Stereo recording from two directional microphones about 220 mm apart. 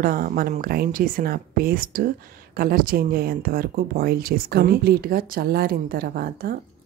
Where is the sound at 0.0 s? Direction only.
40° right (ahead or behind).